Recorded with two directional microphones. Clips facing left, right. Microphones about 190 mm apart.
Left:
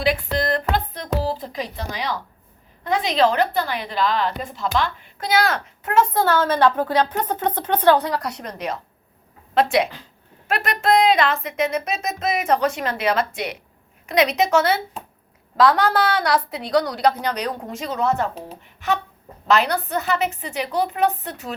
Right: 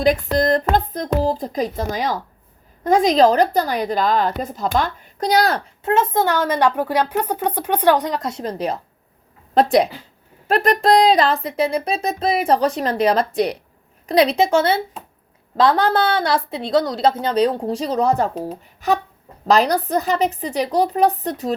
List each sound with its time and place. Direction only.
0.0 s a woman's voice: 40° right (ahead or behind)